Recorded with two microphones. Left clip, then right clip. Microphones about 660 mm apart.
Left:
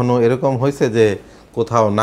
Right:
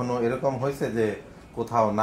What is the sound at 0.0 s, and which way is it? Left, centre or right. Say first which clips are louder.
Speech: left 10 dB; left.